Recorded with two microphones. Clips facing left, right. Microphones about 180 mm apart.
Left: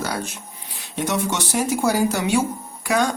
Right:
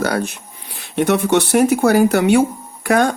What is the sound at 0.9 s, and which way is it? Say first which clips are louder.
Speech: right 8 dB; 60° right (ahead or behind).